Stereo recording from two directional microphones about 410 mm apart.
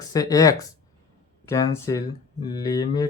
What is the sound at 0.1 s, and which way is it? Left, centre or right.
Speech, centre.